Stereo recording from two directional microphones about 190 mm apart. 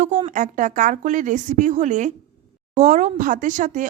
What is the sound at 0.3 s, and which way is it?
Speech, 40° right (ahead or behind).